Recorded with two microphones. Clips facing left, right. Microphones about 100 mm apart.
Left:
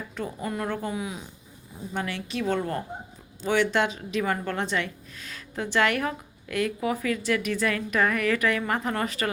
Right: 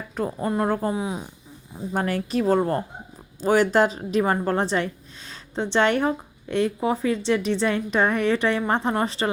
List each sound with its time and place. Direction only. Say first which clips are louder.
0.1 s a woman's voice: right 8 dB; 40° right (ahead or behind)